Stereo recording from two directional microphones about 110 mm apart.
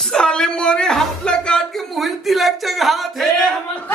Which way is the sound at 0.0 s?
5° left (ahead or behind).